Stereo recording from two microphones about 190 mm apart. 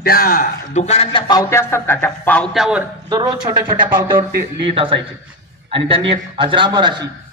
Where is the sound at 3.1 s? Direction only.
20° right (ahead or behind).